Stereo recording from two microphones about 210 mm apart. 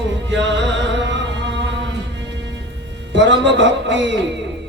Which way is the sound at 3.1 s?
60° right (ahead or behind).